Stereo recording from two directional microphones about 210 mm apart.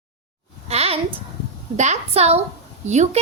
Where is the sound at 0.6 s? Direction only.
30° right (ahead or behind).